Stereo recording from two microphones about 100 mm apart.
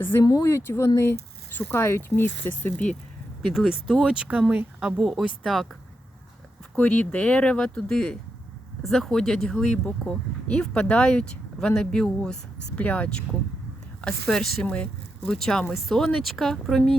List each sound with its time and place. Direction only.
0.0 s speech: 20° left (ahead or behind)
3.5 s speech: 5° right (ahead or behind)
6.7 s speech: 15° left (ahead or behind)